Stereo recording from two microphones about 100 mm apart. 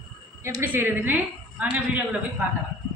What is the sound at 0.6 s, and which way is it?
A woman's voice, 20° right (ahead or behind).